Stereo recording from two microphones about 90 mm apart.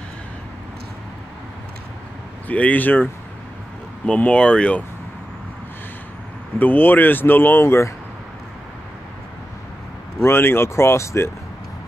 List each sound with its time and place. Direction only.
2.4 s speech: 15° left (ahead or behind)
6.6 s speech: 20° left (ahead or behind)
10.2 s speech: 25° left (ahead or behind)